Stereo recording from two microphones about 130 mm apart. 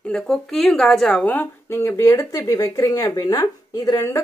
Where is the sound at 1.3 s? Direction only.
15° left (ahead or behind).